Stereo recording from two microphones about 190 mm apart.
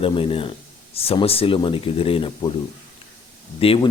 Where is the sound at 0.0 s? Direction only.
30° left (ahead or behind).